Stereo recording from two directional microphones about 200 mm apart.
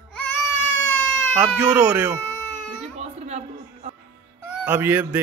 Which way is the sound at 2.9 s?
35° right (ahead or behind).